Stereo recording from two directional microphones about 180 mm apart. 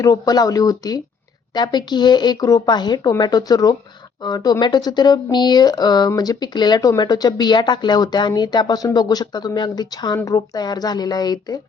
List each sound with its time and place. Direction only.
0.0 s speech: 20° left (ahead or behind)